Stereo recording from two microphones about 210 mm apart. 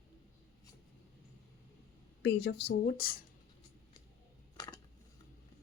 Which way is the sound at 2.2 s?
55° left (ahead or behind).